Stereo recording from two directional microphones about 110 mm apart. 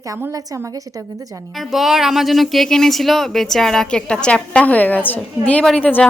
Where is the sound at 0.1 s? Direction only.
30° right (ahead or behind).